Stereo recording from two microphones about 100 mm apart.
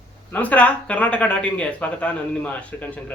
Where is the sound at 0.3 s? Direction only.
15° left (ahead or behind).